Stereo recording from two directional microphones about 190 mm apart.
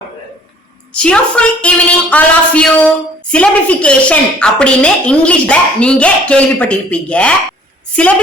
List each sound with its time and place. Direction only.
0.9 s a woman's voice: 5° left (ahead or behind)